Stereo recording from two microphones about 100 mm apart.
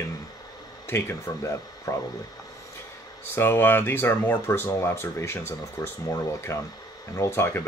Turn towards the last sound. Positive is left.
turn(degrees=25)  # may be behind; listen again after turning